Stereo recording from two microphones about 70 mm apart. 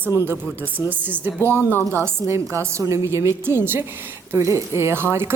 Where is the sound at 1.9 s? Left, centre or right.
Right.